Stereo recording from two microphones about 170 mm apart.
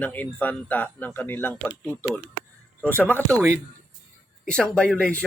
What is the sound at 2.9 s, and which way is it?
Speech, 10° left (ahead or behind).